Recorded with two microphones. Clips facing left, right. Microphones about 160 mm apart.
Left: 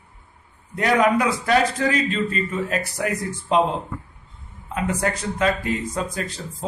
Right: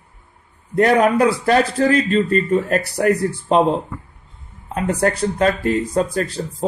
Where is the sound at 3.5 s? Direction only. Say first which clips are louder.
Right 3 dB; 45° right (ahead or behind).